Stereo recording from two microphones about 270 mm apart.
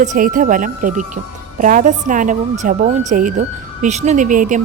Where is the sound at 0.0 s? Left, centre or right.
Right.